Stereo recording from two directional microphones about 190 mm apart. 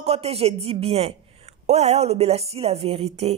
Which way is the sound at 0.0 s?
35° right (ahead or behind).